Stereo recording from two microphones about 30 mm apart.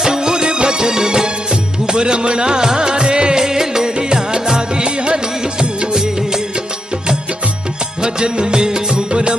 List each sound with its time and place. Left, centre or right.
0.0 s music: right
3.4 s music: centre; by 5.2 s right
5.9 s music of bollywood: centre
8.0 s music: right